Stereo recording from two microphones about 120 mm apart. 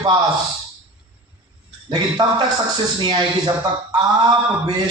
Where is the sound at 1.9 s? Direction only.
40° right (ahead or behind).